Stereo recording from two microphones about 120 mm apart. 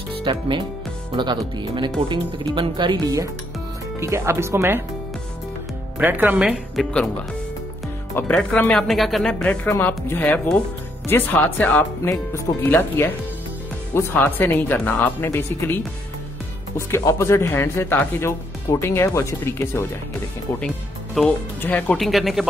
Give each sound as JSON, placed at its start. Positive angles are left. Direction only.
{"t": 0.2, "sound": "speech", "side_deg": -40}
{"t": 5.9, "sound": "speech", "side_deg": -15}
{"t": 6.8, "sound": "speech", "side_deg": 10}
{"t": 8.2, "sound": "speech", "side_deg": 10}
{"t": 9.7, "sound": "speech", "side_deg": 20}
{"t": 20.6, "sound": "music", "side_deg": 5}
{"t": 21.5, "sound": "speech", "side_deg": 15}
{"t": 21.9, "sound": "speech", "side_deg": 0}